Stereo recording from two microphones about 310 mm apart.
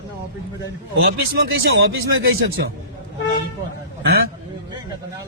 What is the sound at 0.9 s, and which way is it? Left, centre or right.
A man's voice, right.